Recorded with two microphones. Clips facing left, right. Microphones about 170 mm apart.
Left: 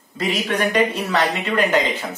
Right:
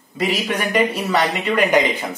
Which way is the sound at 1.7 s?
15° right (ahead or behind).